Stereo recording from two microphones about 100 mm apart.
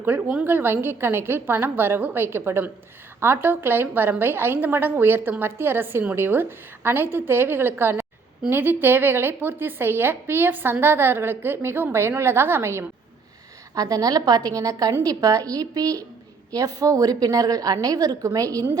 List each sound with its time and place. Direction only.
0.0 s a woman's voice: 20° right (ahead or behind)
13.7 s a woman's voice: 35° right (ahead or behind)